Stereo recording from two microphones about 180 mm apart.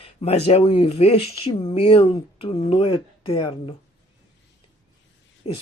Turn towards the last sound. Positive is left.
turn(degrees=35)  # may be behind; listen again after turning